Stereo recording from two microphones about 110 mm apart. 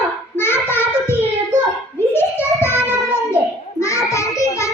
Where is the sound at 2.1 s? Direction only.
20° left (ahead or behind).